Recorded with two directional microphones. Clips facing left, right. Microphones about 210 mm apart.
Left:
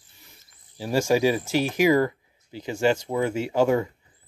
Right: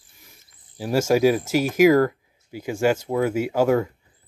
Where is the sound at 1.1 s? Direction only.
10° right (ahead or behind).